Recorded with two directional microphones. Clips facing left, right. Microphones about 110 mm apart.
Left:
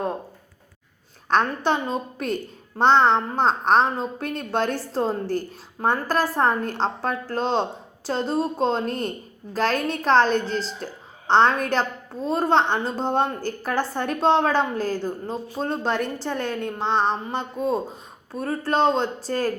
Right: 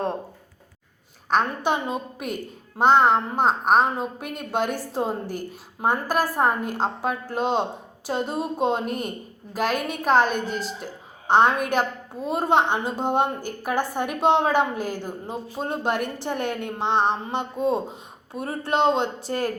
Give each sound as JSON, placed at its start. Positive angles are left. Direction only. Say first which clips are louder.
{"t": 1.3, "sound": "a woman's voice", "louder": "left 1 dB", "side_deg": -5}